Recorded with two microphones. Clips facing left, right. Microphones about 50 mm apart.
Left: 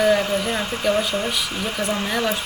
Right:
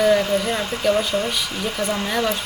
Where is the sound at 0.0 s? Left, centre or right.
Centre.